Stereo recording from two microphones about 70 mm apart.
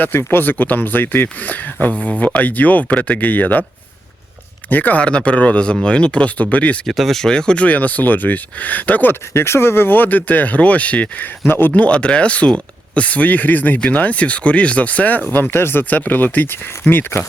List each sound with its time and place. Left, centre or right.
0.0 s speech: left
4.7 s speech: left
6.8 s speech: centre; by 11.3 s left
11.4 s speech: left
11.7 s speech: centre